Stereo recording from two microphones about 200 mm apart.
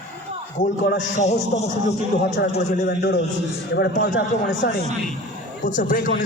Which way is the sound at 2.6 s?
50° left (ahead or behind).